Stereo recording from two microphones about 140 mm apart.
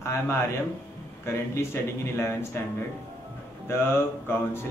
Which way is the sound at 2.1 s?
20° left (ahead or behind).